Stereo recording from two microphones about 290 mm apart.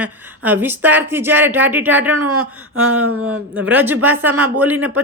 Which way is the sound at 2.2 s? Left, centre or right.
Right.